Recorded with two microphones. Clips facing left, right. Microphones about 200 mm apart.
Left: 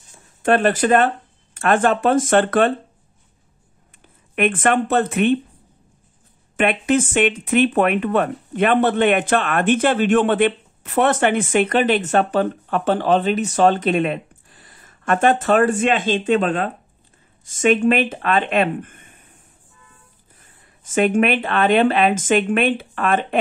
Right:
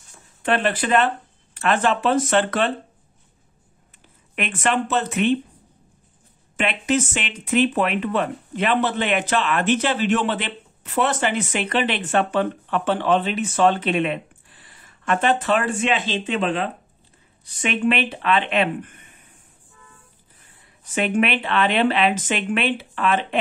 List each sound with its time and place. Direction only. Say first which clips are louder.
0.4 s speech: left 5 dB; 45° left (ahead or behind)
4.4 s speech: left 5 dB; 55° left (ahead or behind)
6.5 s speech: left 4 dB; 55° left (ahead or behind)
20.3 s speech: left 1 dB; 45° left (ahead or behind)